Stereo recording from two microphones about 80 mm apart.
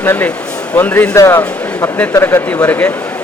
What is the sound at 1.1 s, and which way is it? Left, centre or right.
A man's voice, left.